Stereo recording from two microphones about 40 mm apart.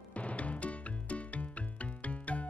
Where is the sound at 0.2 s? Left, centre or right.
Left.